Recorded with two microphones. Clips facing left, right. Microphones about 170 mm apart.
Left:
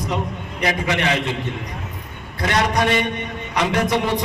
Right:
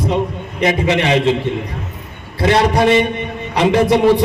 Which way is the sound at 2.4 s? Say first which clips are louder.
Right 6 dB; 30° right (ahead or behind).